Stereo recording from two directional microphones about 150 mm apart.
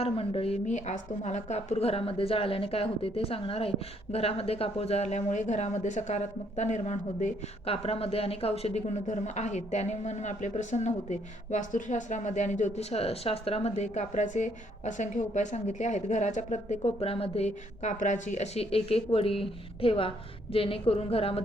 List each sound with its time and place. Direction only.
0.0 s a woman's voice: 40° left (ahead or behind)